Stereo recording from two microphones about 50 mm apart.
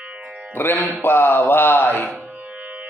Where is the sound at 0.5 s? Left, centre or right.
Left.